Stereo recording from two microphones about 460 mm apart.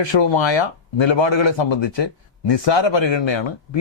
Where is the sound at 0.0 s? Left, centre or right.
Left.